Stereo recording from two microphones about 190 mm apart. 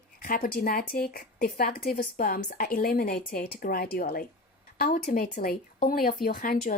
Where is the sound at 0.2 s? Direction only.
45° left (ahead or behind).